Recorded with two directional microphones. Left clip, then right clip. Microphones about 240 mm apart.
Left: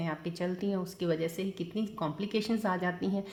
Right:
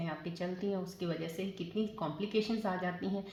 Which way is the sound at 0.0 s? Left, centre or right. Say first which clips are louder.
Left 4 dB; left.